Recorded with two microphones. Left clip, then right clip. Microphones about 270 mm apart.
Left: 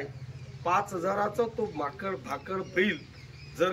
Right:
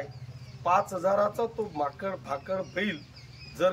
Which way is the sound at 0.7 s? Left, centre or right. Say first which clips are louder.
Right 3 dB; centre.